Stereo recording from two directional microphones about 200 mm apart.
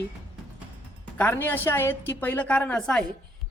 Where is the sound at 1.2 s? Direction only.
10° left (ahead or behind).